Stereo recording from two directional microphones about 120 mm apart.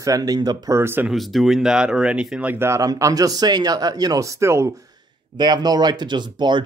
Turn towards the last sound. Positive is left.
turn(degrees=-40)  # may be behind; listen again after turning